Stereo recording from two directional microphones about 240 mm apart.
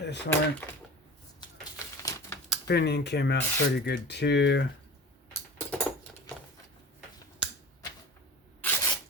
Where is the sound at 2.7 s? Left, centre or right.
Left.